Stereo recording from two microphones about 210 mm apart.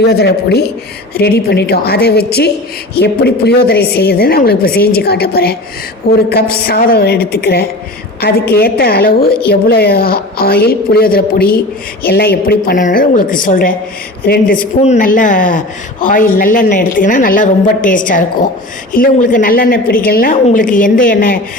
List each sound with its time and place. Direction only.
0.0 s a woman's voice: 50° left (ahead or behind)